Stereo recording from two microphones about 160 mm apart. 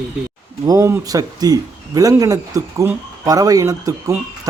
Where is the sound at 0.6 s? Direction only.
20° right (ahead or behind).